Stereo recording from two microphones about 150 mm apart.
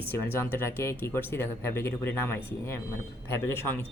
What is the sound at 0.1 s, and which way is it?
Speech, 15° left (ahead or behind).